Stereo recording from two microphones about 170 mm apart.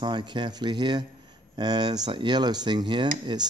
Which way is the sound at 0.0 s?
25° right (ahead or behind).